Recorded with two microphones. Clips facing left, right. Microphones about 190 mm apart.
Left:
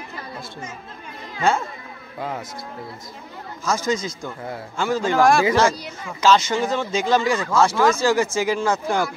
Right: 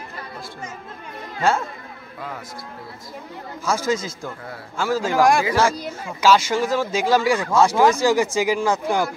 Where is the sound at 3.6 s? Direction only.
5° right (ahead or behind).